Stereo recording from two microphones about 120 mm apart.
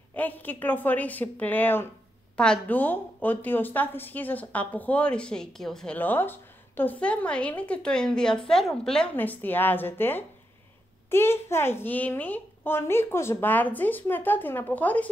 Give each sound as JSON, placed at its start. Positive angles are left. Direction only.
{"t": 0.1, "sound": "a child's voice", "side_deg": 15}
{"t": 5.9, "sound": "a child's voice", "side_deg": 15}